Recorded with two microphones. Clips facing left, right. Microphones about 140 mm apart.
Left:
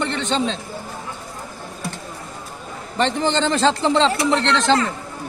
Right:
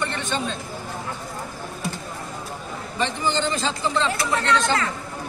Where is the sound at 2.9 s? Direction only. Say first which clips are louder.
Left 5 dB; 75° left (ahead or behind).